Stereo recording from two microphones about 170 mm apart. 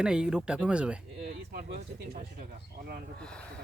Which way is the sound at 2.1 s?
55° right (ahead or behind).